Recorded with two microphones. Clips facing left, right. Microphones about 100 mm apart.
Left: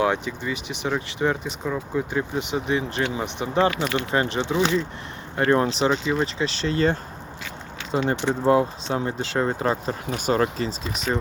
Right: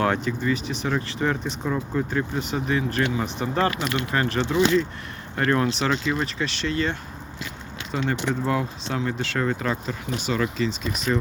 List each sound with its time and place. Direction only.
0.0 s speech: 15° left (ahead or behind)
1.5 s speech: 5° left (ahead or behind)
2.1 s speech: 15° left (ahead or behind); by 10.8 s 40° left (ahead or behind)
10.9 s speech: 30° left (ahead or behind)